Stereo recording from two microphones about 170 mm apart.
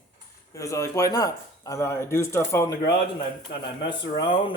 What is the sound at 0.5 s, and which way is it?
Speech, 20° left (ahead or behind).